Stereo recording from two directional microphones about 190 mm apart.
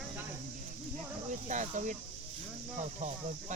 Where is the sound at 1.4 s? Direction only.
40° right (ahead or behind).